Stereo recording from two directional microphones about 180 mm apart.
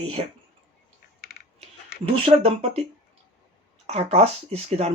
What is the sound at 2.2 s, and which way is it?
Speech, 35° right (ahead or behind).